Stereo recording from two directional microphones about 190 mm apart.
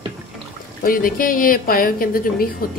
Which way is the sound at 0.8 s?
50° left (ahead or behind).